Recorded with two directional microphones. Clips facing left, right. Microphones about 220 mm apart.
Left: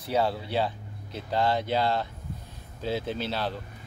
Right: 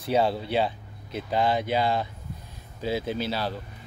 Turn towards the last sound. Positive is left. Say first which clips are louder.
# right 2 dB
turn(degrees=-5)  # may be behind; listen again after turning